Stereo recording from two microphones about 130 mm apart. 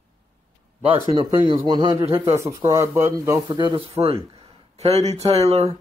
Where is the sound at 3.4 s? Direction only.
40° right (ahead or behind); by 5.7 s 55° right (ahead or behind).